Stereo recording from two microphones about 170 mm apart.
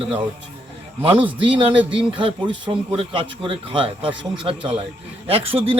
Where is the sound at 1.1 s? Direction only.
30° right (ahead or behind).